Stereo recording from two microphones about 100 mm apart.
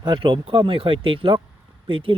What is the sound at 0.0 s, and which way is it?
Speech, 50° right (ahead or behind).